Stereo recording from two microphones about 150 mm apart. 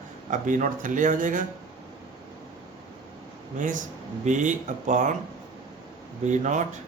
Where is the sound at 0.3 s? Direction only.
60° right (ahead or behind).